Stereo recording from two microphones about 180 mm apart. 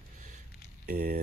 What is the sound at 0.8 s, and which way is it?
Speech, 55° right (ahead or behind).